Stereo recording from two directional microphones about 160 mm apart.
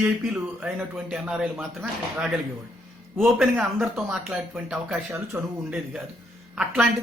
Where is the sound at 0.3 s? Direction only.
5° right (ahead or behind).